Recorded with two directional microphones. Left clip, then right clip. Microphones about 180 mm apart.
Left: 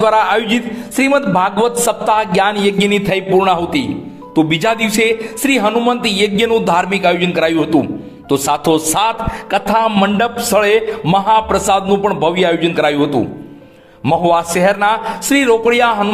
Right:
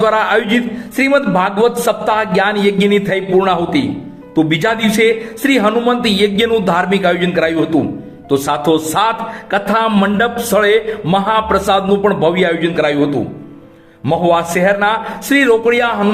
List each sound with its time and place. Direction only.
0.0 s a man's voice: 25° left (ahead or behind)